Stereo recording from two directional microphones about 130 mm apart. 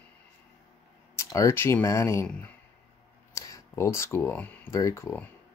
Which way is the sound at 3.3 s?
25° left (ahead or behind).